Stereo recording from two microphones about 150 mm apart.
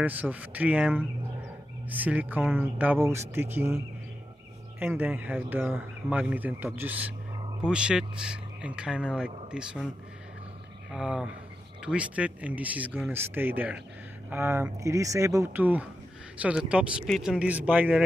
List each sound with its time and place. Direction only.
0.0 s speech: 10° right (ahead or behind)
10.9 s speech: 5° right (ahead or behind)